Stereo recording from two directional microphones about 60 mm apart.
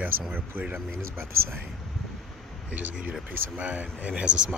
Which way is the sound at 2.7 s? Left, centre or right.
Right.